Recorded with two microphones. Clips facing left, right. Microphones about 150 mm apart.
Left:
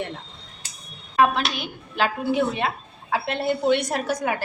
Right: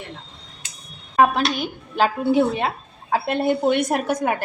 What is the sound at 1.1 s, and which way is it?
A woman's voice, 45° right (ahead or behind).